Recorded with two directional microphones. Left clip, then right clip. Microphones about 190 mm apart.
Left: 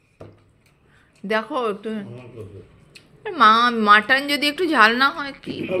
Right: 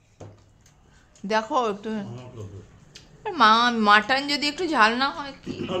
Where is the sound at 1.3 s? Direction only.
5° right (ahead or behind).